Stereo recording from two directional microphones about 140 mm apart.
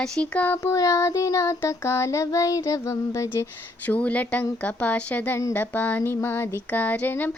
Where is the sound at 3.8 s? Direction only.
10° left (ahead or behind).